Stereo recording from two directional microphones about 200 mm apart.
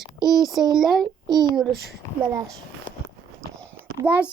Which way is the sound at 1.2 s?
20° right (ahead or behind).